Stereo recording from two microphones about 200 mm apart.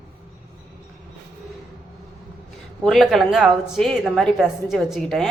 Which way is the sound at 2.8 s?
Centre (ahead or behind).